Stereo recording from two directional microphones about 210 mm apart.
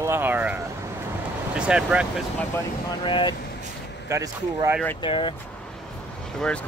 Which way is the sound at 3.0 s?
25° left (ahead or behind).